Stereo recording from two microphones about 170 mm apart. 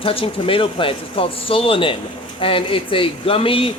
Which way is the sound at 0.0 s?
30° left (ahead or behind).